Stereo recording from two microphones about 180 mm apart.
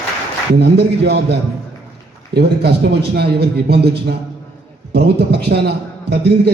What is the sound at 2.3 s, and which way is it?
A man's voice, 65° right (ahead or behind).